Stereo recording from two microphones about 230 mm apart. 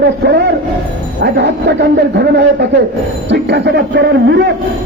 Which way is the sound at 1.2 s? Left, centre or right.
Right.